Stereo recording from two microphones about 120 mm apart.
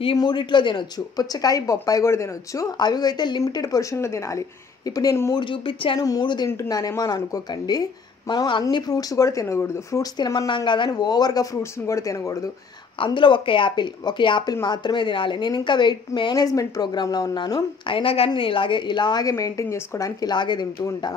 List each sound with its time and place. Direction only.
0.2 s speech: 40° left (ahead or behind)
5.4 s speech: 45° left (ahead or behind)
5.9 s speech: 30° left (ahead or behind)
13.0 s speech: 40° left (ahead or behind)
17.8 s speech: 50° left (ahead or behind)